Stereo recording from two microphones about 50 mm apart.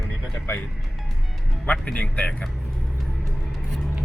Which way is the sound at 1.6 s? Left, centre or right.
Left.